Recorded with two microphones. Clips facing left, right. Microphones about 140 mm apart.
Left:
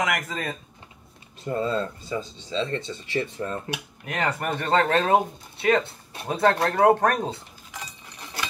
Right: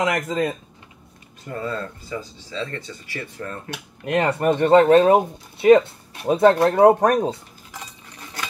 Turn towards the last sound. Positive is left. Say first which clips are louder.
# right 5 dB
turn(degrees=-15)  # may be behind; listen again after turning